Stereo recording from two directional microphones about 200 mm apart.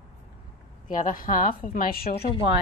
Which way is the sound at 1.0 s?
45° left (ahead or behind).